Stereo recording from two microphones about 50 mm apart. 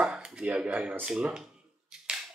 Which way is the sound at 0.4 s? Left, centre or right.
Right.